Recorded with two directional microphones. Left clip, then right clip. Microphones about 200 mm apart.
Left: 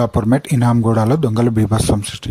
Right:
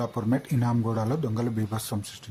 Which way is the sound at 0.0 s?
40° left (ahead or behind).